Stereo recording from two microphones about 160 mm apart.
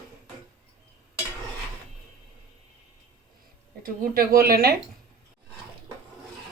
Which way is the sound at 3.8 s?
65° right (ahead or behind).